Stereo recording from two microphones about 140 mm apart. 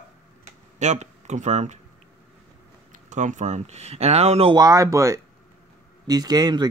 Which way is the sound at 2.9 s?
60° right (ahead or behind).